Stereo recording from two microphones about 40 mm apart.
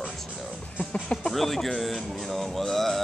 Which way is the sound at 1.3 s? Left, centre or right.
Centre.